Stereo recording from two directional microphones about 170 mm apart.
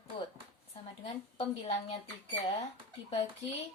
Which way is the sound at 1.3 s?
35° left (ahead or behind).